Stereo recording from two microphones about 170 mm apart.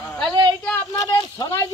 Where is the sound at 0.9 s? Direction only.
25° left (ahead or behind).